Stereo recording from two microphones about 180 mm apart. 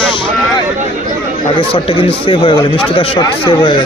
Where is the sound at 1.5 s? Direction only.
30° left (ahead or behind).